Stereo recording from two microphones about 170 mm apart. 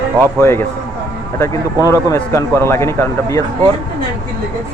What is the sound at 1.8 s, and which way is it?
A man's voice, 20° left (ahead or behind).